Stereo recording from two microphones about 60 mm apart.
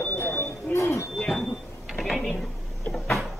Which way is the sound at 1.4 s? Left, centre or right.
Centre.